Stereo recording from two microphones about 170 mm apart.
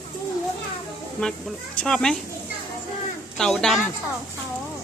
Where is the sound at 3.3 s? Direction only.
5° left (ahead or behind).